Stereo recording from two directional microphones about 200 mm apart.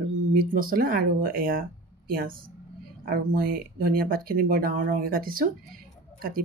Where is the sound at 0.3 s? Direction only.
45° right (ahead or behind).